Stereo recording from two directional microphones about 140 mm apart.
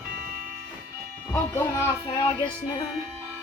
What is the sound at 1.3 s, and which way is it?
Speech, 20° left (ahead or behind).